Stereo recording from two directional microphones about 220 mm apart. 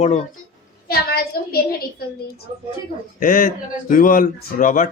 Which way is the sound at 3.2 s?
40° left (ahead or behind).